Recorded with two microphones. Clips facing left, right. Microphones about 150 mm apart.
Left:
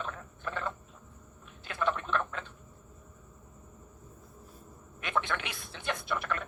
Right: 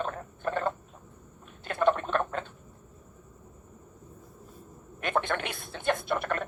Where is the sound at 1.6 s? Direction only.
50° right (ahead or behind).